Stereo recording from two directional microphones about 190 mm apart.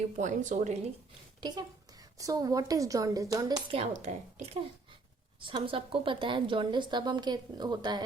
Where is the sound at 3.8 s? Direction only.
35° right (ahead or behind).